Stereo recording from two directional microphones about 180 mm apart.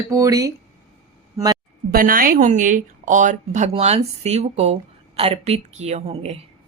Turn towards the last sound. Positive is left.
turn(degrees=-35)  # may be behind; listen again after turning